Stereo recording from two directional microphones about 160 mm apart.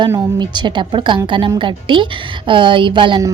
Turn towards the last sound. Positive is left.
turn(degrees=-30)  # may be behind; listen again after turning